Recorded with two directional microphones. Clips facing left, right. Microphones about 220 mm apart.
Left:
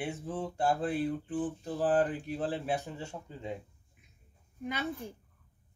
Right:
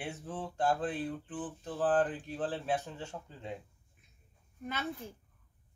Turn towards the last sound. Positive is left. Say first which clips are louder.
# left 3 dB
turn(degrees=15)  # may be behind; listen again after turning